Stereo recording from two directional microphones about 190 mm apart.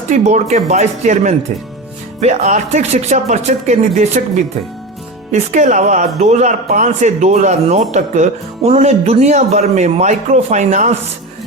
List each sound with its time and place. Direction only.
0.1 s a man's voice: 35° right (ahead or behind)
5.3 s a man's voice: 40° right (ahead or behind)